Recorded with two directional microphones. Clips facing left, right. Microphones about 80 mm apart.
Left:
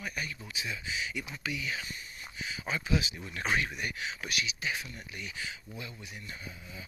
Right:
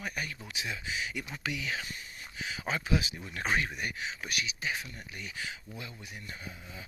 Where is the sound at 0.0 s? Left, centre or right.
Right.